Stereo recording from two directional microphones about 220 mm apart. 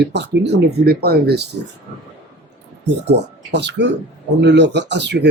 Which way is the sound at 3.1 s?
50° right (ahead or behind).